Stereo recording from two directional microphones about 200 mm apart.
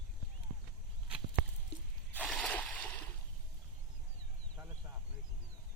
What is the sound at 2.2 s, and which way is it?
Splash, 5° left (ahead or behind).